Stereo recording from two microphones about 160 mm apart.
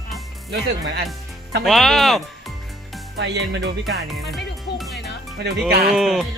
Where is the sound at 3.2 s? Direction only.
90° right.